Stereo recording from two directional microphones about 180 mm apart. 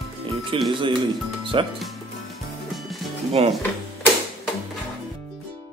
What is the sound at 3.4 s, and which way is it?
Speech, 35° right (ahead or behind).